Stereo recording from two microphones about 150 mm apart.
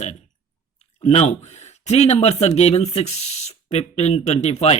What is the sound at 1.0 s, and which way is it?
Speech, 50° left (ahead or behind).